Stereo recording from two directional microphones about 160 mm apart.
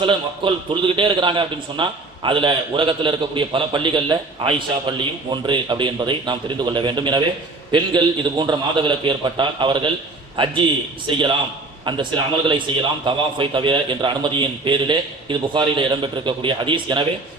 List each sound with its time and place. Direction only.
0.0 s a man's voice: 30° right (ahead or behind)